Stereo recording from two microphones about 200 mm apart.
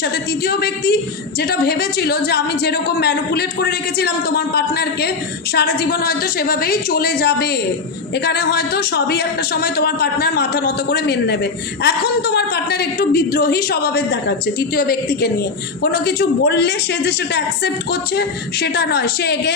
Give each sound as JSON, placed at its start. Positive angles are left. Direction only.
{"t": 0.0, "sound": "a woman's voice", "side_deg": 55}